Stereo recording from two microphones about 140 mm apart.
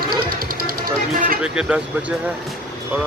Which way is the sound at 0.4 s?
90° right.